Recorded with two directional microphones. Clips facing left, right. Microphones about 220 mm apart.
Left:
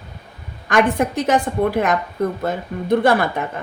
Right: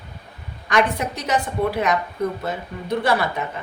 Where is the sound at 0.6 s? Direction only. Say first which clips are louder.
Left 4 dB; 50° left (ahead or behind).